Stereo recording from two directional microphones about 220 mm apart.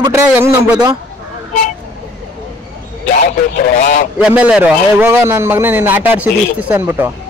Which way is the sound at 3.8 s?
35° left (ahead or behind).